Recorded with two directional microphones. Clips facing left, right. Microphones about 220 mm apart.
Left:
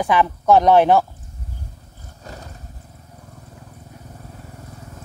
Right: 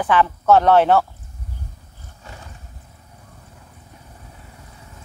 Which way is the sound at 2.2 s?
40° left (ahead or behind).